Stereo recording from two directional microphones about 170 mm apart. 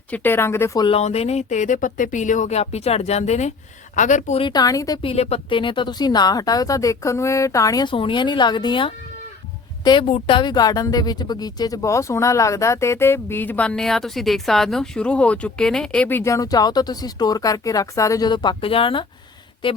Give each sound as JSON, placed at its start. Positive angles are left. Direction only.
{"t": 0.1, "sound": "speech", "side_deg": 10}
{"t": 0.9, "sound": "speech", "side_deg": 35}
{"t": 4.4, "sound": "speech", "side_deg": 20}
{"t": 5.0, "sound": "speech", "side_deg": 35}